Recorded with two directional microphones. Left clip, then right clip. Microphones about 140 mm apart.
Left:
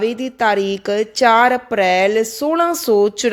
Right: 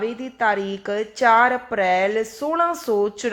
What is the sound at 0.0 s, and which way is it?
Speech, 50° left (ahead or behind).